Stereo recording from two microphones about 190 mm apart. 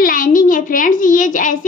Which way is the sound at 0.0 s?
45° left (ahead or behind).